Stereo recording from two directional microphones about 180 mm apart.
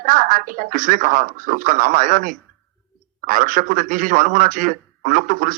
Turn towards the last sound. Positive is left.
turn(degrees=-50)  # may be behind; listen again after turning